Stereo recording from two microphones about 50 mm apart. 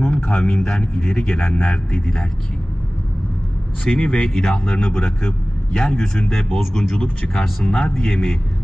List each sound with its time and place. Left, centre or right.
0.0 s speech: centre
3.8 s speech: centre